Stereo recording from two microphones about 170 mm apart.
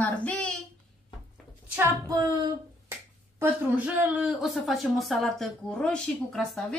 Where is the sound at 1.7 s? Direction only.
20° right (ahead or behind).